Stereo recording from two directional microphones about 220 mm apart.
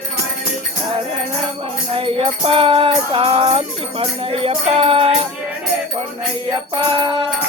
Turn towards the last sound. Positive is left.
turn(degrees=-20)  # may be behind; listen again after turning